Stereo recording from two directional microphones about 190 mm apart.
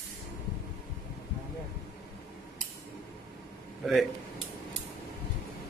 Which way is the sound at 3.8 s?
Centre (ahead or behind).